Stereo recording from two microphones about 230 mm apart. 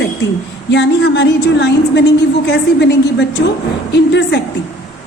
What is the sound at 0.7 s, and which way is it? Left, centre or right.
A woman's voice, left.